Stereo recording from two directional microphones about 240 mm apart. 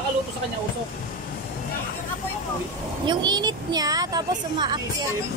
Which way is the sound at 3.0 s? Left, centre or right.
Centre.